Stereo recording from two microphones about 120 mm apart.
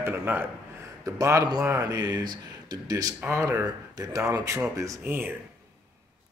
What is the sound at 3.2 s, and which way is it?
Speech, 20° right (ahead or behind).